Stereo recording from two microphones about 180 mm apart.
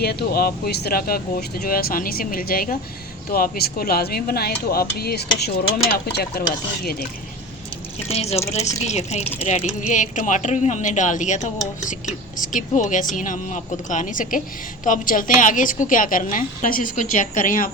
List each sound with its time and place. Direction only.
0.0 s speech: 60° left (ahead or behind)
8.0 s a woman's voice: 35° left (ahead or behind)